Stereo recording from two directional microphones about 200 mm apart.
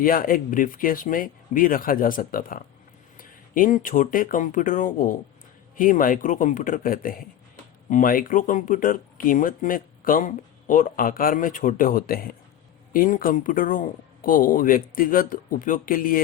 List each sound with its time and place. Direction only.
0.0 s a man's voice: 45° left (ahead or behind)